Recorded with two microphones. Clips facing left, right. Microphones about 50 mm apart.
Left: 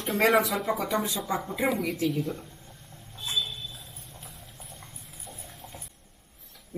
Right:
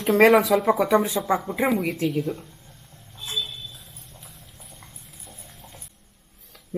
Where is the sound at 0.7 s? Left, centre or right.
Right.